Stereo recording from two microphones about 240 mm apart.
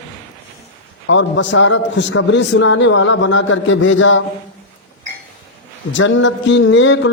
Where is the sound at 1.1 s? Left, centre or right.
Left.